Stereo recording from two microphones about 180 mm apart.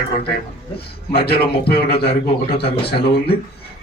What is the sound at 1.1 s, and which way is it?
Speech, 60° left (ahead or behind).